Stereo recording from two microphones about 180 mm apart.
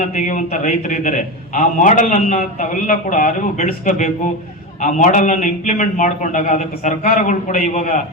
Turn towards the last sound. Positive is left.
turn(degrees=45)  # may be behind; listen again after turning